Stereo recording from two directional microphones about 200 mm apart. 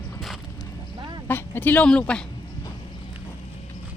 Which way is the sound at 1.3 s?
10° left (ahead or behind).